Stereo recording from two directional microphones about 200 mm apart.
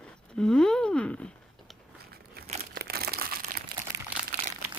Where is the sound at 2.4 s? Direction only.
50° right (ahead or behind).